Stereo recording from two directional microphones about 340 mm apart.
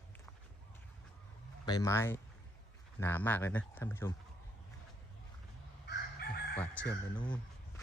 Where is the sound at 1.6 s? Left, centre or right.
Centre.